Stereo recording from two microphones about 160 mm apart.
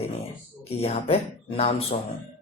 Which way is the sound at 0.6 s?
40° left (ahead or behind).